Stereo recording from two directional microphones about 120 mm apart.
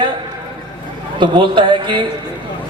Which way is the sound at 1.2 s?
40° right (ahead or behind).